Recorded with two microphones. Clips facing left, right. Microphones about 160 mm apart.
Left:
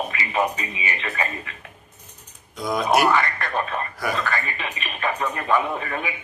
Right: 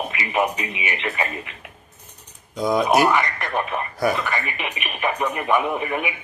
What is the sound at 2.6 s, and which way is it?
Speech, 20° right (ahead or behind).